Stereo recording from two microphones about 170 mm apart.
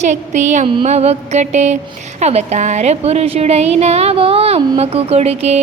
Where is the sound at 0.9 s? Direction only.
40° right (ahead or behind).